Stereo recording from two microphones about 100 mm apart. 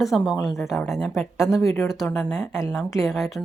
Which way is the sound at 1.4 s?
30° left (ahead or behind).